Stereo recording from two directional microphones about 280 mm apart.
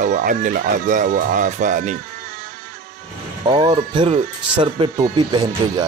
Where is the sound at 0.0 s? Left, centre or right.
Right.